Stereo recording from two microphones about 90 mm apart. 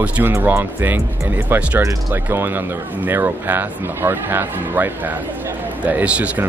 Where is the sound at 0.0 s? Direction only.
15° right (ahead or behind).